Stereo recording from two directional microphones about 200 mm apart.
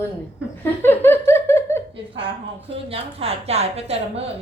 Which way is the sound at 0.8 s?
10° left (ahead or behind).